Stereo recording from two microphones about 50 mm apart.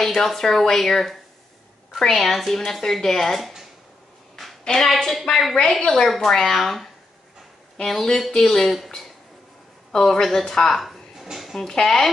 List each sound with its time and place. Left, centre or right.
0.0 s speech: centre
4.7 s speech: centre
9.9 s speech: centre
11.7 s speech: centre